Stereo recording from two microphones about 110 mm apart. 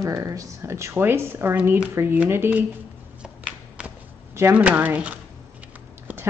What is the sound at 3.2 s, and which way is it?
Shuffling cards, 10° right (ahead or behind).